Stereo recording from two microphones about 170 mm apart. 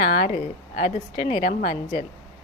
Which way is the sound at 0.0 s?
50° left (ahead or behind).